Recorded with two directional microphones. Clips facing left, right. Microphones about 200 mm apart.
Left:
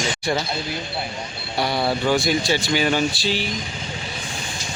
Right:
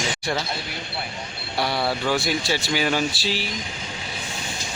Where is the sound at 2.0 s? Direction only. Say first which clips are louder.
Left 4 dB; centre (ahead or behind).